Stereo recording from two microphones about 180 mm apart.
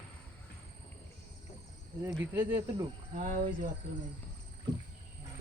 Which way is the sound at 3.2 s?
50° right (ahead or behind).